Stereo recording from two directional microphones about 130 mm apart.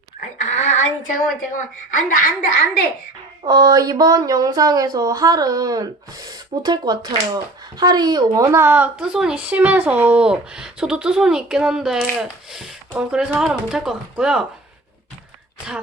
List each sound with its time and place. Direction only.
0.3 s child singing: 65° left (ahead or behind)
2.0 s a woman's voice: 90° left
3.4 s speech: 30° right (ahead or behind); by 14.4 s 5° right (ahead or behind)